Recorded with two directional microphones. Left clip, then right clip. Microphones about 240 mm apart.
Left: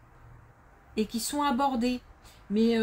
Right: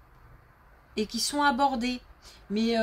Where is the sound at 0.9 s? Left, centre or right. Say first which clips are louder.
Right 2 dB; right.